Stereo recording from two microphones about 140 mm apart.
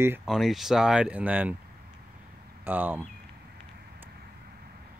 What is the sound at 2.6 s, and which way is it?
Speech, 15° right (ahead or behind).